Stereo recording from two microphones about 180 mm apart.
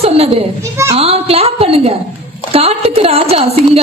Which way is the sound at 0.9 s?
35° right (ahead or behind).